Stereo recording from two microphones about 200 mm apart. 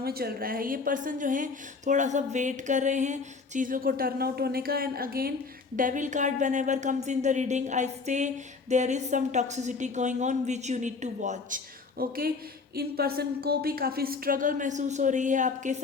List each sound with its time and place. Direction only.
0.0 s a woman's voice: 50° right (ahead or behind)